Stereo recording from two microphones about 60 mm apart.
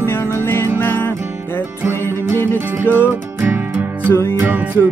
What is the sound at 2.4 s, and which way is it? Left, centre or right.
Music, left.